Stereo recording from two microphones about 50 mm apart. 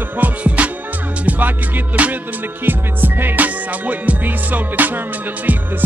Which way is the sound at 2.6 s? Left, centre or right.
Right.